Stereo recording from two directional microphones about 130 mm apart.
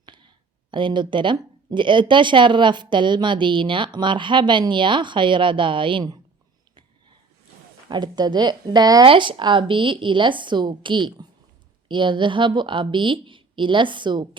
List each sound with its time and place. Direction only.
0.0 s a sound: 35° right (ahead or behind)
0.7 s speech: 40° right (ahead or behind)
7.9 s speech: 35° right (ahead or behind)
9.0 s speech: 40° right (ahead or behind)